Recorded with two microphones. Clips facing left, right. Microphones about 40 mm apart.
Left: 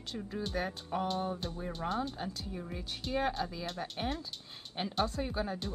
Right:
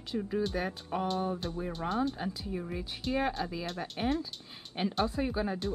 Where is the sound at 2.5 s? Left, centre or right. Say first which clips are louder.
Right 5 dB; centre.